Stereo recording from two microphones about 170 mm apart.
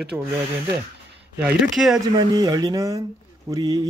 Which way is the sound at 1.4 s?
5° right (ahead or behind).